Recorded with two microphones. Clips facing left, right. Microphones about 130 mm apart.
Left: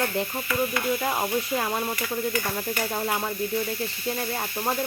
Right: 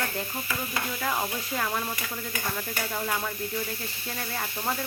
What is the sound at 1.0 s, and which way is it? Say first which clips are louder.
Speech: left 4 dB; 25° left (ahead or behind).